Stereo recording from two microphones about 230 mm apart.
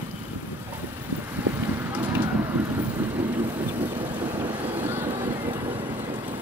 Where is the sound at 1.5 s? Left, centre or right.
Centre.